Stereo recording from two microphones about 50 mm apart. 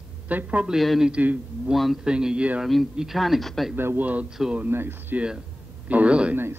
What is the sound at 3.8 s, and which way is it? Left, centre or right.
Speech, right.